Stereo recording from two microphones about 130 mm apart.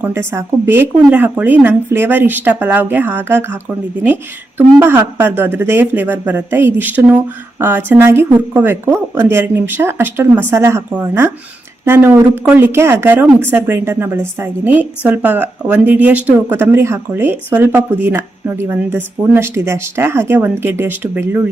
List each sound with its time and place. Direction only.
0.0 s a woman's voice: 20° right (ahead or behind)